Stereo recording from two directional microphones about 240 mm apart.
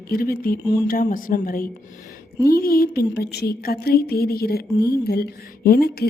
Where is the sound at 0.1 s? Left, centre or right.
Left.